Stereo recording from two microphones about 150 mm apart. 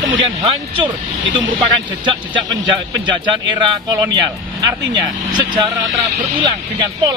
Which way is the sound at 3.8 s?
25° right (ahead or behind).